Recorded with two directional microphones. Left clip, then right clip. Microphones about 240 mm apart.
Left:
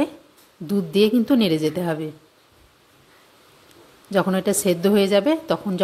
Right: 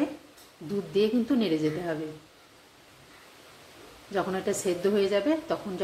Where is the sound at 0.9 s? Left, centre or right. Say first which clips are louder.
Left 7 dB; left.